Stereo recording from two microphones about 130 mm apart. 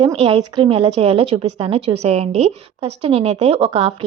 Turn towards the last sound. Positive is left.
turn(degrees=-45)  # may be behind; listen again after turning